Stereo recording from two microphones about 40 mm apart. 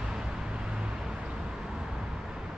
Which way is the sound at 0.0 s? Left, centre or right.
Centre.